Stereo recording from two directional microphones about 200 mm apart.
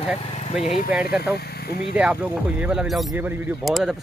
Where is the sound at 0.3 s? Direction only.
35° left (ahead or behind).